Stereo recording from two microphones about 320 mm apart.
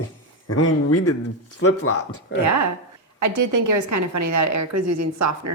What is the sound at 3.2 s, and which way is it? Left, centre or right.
A woman's voice, right.